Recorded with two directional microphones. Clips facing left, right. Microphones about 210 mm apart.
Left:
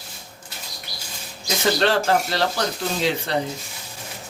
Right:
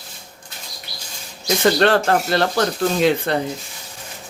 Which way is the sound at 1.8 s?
55° right (ahead or behind).